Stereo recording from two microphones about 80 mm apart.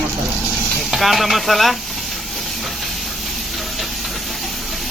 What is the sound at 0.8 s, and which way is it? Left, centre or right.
Hiss, centre.